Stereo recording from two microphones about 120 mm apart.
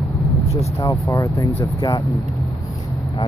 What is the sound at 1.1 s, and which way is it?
Speech, 30° left (ahead or behind).